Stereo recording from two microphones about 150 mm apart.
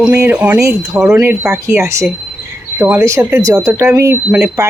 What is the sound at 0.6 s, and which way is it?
Speech, 25° right (ahead or behind).